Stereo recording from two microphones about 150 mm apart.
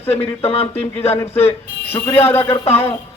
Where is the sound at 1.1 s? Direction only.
15° left (ahead or behind).